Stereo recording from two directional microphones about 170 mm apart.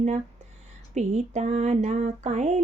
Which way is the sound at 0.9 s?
45° right (ahead or behind).